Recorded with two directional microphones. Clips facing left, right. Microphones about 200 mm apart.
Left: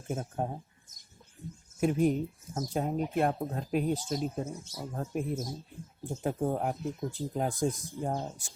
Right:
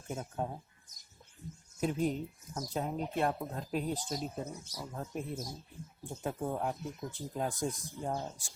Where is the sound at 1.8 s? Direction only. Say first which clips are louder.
Left 5 dB; 50° left (ahead or behind).